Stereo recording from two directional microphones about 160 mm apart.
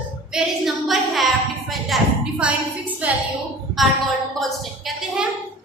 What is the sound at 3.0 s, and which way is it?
Speech, 10° right (ahead or behind).